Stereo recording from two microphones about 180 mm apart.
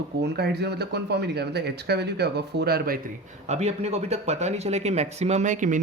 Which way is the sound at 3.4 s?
35° right (ahead or behind).